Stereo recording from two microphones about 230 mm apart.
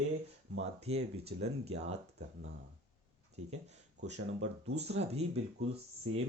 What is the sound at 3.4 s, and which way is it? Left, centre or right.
Speech, right.